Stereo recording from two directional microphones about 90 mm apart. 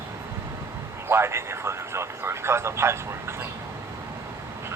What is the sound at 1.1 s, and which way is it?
Speech, 30° right (ahead or behind).